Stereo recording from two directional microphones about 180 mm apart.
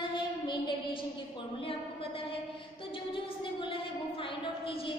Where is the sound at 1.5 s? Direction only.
30° left (ahead or behind).